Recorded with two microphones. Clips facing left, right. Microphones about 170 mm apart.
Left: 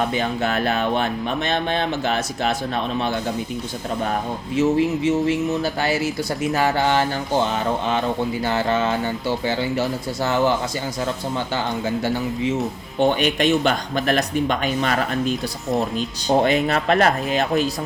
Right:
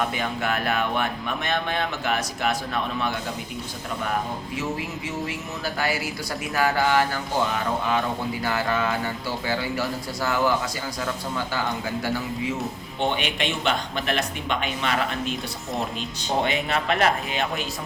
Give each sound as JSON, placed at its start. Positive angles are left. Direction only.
{"t": 0.1, "sound": "speech", "side_deg": 30}
{"t": 4.5, "sound": "speech", "side_deg": 25}
{"t": 13.0, "sound": "speech", "side_deg": 45}